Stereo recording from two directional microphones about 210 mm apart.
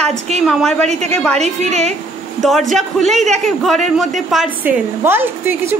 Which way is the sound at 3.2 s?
35° right (ahead or behind).